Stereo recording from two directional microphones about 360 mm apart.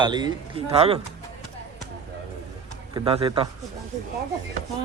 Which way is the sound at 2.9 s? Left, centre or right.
Centre.